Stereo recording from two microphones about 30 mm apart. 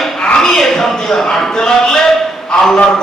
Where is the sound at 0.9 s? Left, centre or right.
Centre.